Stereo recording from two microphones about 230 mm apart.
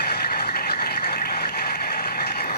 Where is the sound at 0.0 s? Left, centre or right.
Left.